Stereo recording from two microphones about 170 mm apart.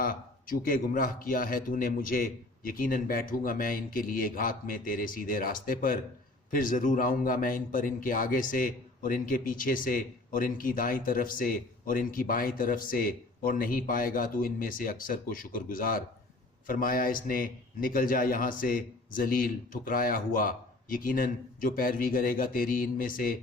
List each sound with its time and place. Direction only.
0.0 s a man's voice: 55° left (ahead or behind)